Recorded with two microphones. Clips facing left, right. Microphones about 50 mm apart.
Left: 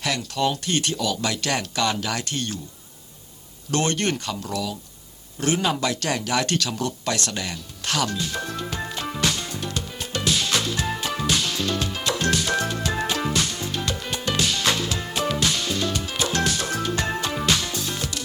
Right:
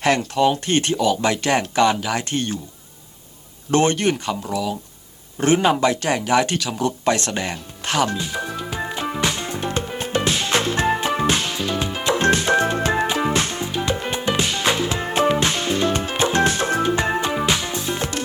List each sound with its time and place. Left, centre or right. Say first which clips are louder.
0.0 s speech: right 8 dB; right
0.3 s speech: right 6 dB; right
2.0 s speech: right 4 dB; centre
2.2 s speech: right 5 dB; right
3.7 s speech: right 6 dB; right
3.9 s speech: right 4 dB; centre
7.0 s music: right 6 dB; right
11.5 s music: right 2 dB; centre
13.3 s music: right 4 dB; right
13.7 s music: right 5 dB; centre